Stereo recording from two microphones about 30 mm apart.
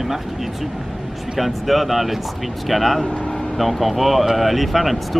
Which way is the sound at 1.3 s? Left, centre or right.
Centre.